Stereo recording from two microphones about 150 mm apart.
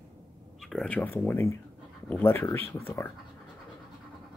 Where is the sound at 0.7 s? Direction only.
5° left (ahead or behind).